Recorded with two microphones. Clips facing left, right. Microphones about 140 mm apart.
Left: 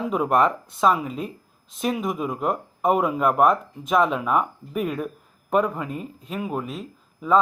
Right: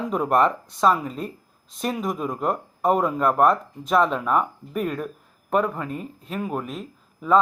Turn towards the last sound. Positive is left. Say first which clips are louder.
# right 1 dB
turn(degrees=0)  # may be behind; listen again after turning